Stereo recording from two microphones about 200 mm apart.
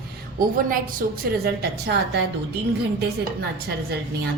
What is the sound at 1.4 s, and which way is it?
Speech, 55° right (ahead or behind).